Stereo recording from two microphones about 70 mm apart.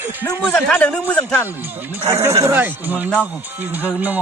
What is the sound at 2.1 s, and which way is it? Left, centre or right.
Speech, right.